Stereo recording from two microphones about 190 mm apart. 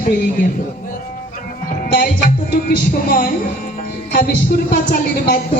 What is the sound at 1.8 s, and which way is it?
Music, 60° left (ahead or behind).